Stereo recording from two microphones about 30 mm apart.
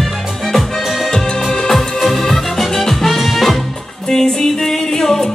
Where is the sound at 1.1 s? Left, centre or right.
Centre.